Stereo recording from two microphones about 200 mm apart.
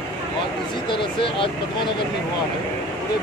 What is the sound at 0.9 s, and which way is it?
Speech, 25° left (ahead or behind).